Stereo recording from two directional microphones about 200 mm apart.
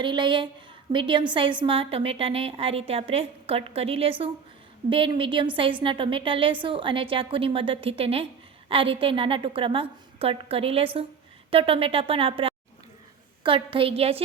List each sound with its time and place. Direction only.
0.0 s a woman's voice: 25° right (ahead or behind)